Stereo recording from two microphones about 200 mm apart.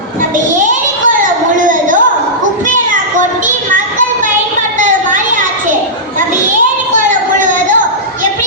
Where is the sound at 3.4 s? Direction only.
40° right (ahead or behind).